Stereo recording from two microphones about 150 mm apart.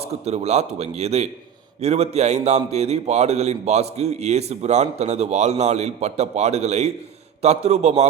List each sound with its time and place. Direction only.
0.3 s a man's voice: 45° right (ahead or behind)